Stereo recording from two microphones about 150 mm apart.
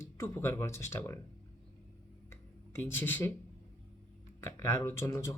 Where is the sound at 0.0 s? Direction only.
15° left (ahead or behind).